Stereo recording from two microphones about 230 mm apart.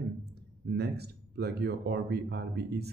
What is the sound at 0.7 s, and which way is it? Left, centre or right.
Speech, right.